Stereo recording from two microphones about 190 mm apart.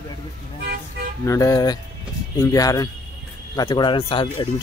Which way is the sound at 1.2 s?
15° left (ahead or behind).